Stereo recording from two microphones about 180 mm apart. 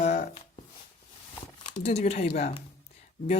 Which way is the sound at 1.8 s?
35° left (ahead or behind).